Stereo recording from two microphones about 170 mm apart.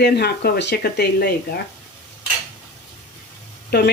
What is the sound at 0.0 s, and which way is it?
Speech, 70° left (ahead or behind).